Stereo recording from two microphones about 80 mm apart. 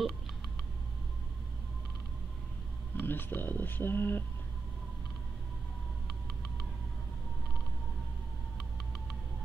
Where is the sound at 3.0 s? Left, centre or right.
Left.